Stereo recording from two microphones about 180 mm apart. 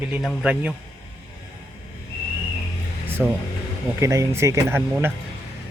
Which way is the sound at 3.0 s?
10° right (ahead or behind).